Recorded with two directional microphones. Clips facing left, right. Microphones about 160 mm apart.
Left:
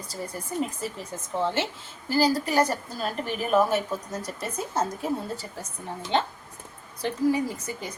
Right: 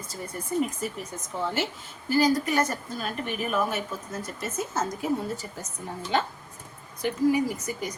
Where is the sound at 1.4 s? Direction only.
25° left (ahead or behind).